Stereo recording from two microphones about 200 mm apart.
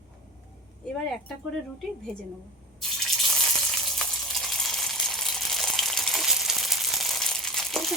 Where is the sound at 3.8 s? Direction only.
Centre (ahead or behind).